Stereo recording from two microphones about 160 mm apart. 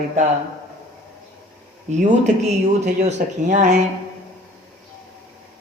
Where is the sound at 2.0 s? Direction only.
45° right (ahead or behind).